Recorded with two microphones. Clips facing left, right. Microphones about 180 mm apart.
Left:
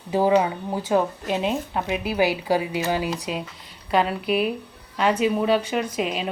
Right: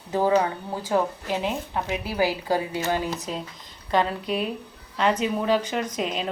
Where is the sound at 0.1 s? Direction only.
15° left (ahead or behind).